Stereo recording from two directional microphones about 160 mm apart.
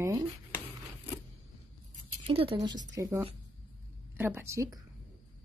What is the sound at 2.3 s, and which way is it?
Speech, 35° right (ahead or behind).